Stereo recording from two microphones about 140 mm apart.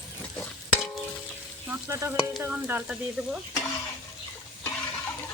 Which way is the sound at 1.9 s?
20° right (ahead or behind).